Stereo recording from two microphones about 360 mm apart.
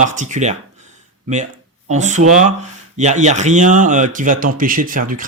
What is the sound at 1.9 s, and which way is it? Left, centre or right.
Speech, centre.